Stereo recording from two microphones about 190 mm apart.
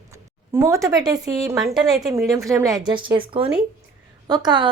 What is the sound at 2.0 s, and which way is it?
A woman's voice, 15° right (ahead or behind).